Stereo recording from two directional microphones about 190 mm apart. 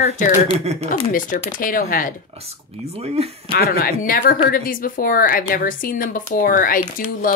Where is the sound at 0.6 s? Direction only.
35° right (ahead or behind).